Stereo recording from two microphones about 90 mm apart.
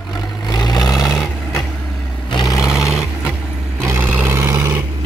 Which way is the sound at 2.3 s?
50° left (ahead or behind).